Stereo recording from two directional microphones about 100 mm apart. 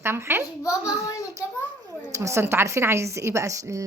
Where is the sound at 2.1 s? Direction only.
30° right (ahead or behind).